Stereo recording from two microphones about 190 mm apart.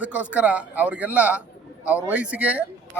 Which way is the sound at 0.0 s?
5° right (ahead or behind).